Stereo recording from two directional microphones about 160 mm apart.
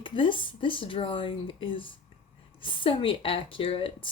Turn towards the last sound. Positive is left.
turn(degrees=35)  # may be behind; listen again after turning